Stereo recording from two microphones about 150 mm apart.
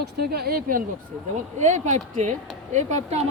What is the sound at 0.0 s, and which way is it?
Speech, 90° right.